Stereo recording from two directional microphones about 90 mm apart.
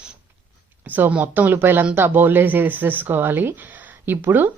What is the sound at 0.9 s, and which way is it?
A woman's voice, 20° right (ahead or behind).